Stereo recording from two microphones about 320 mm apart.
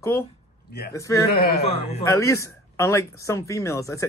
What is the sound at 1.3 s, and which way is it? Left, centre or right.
Speech, left.